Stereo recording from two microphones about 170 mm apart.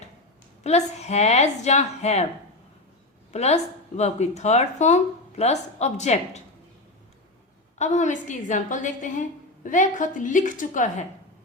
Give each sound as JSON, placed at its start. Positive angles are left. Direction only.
{"t": 0.6, "sound": "speech", "side_deg": 40}
{"t": 3.3, "sound": "speech", "side_deg": 40}
{"t": 7.8, "sound": "a woman's voice", "side_deg": 45}